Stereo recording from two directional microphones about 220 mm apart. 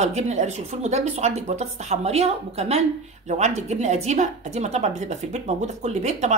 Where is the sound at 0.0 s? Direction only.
30° right (ahead or behind).